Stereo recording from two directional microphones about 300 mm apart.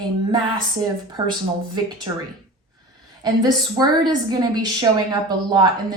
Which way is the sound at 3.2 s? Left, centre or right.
Centre.